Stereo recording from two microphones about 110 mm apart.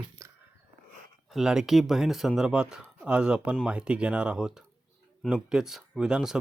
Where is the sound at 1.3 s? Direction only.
5° right (ahead or behind).